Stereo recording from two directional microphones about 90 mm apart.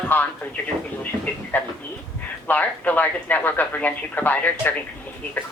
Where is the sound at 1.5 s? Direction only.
20° left (ahead or behind).